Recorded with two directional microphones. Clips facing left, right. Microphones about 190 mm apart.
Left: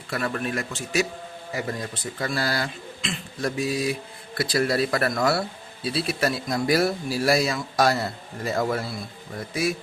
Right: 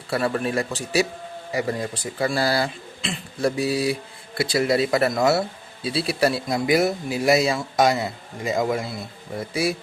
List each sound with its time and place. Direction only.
0.1 s speech: 30° right (ahead or behind); by 8.9 s 15° right (ahead or behind)
9.4 s speech: 30° right (ahead or behind)